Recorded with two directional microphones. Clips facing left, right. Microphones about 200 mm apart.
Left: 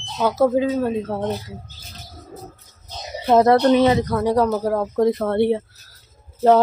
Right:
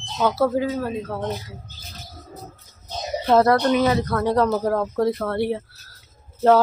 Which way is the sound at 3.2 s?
15° left (ahead or behind).